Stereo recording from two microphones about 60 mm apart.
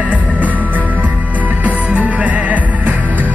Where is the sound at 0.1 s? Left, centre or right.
Right.